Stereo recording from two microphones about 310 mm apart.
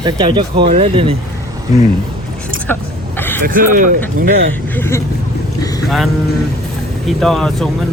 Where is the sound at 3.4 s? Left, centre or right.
Right.